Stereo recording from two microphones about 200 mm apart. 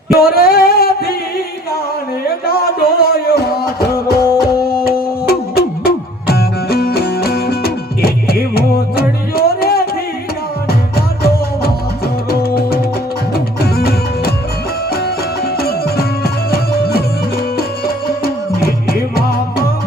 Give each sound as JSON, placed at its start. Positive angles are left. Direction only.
{"t": 0.2, "sound": "a sound", "side_deg": 50}
{"t": 3.0, "sound": "music", "side_deg": 50}
{"t": 15.5, "sound": "music", "side_deg": 50}
{"t": 18.2, "sound": "music", "side_deg": 50}